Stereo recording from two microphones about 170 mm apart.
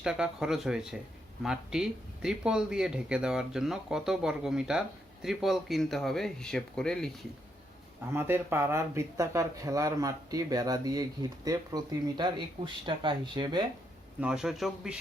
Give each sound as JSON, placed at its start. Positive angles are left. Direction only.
{"t": 0.0, "sound": "speech", "side_deg": -5}
{"t": 8.1, "sound": "speech", "side_deg": -15}
{"t": 14.2, "sound": "speech", "side_deg": -5}